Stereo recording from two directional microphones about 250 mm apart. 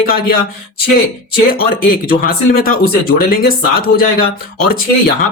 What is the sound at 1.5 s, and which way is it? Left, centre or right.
Speech, left.